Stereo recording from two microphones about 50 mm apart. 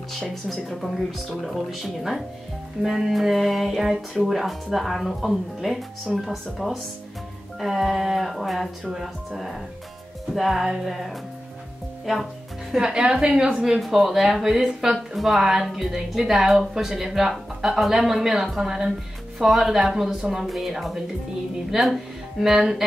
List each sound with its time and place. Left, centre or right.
0.6 s speech: centre
12.7 s speech: centre
13.7 s speech: centre